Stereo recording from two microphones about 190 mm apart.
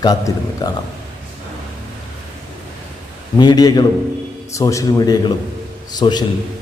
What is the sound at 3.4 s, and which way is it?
A man's voice, 20° left (ahead or behind).